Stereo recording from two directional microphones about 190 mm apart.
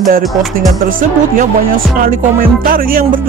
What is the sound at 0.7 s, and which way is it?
Music, 45° right (ahead or behind).